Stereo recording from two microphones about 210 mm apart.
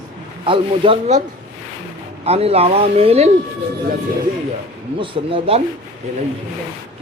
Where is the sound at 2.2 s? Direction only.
30° right (ahead or behind).